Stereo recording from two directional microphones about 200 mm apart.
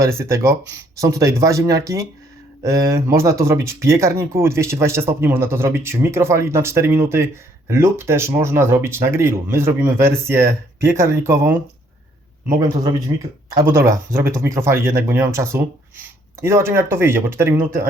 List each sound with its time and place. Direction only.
0.0 s speech: 15° right (ahead or behind)
12.5 s speech: 15° right (ahead or behind)